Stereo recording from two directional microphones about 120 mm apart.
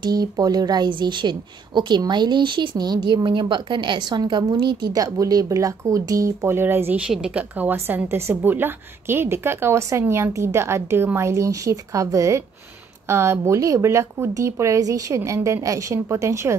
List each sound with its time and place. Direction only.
0.0 s a woman's voice: 35° right (ahead or behind); by 7.0 s 15° right (ahead or behind)
7.1 s a woman's voice: 5° right (ahead or behind); by 16.5 s 25° right (ahead or behind)